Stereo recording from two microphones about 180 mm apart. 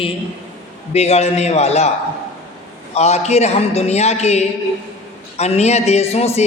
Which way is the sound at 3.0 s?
35° left (ahead or behind).